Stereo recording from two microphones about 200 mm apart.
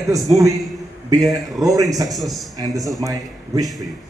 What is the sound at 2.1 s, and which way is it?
Speech, centre (ahead or behind).